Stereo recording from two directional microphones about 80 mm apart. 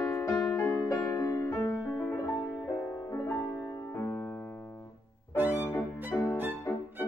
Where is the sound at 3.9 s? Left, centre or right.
Left.